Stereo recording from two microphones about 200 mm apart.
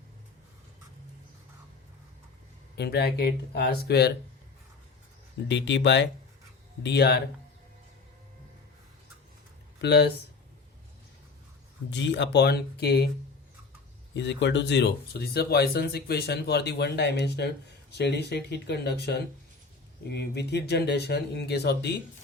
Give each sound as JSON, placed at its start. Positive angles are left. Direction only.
{"t": 2.7, "sound": "speech", "side_deg": 55}
{"t": 5.5, "sound": "speech", "side_deg": 60}
{"t": 9.8, "sound": "speech", "side_deg": 55}
{"t": 11.9, "sound": "speech", "side_deg": 60}
{"t": 14.1, "sound": "speech", "side_deg": 60}